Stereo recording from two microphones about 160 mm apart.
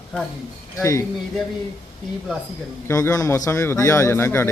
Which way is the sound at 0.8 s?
20° left (ahead or behind).